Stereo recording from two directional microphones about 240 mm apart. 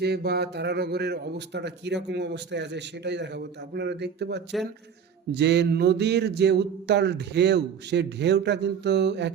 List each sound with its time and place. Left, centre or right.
0.0 s speech: right